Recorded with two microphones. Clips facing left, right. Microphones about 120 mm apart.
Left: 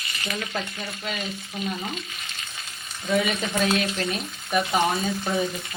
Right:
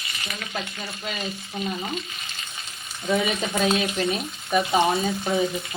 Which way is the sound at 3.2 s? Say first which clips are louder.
Right 1 dB; 20° right (ahead or behind).